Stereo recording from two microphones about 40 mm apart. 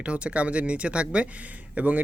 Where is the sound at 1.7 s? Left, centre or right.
Right.